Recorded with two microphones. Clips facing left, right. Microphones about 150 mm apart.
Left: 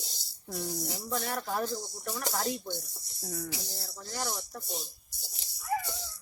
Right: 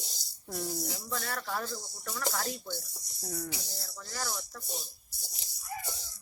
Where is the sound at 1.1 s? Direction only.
20° left (ahead or behind).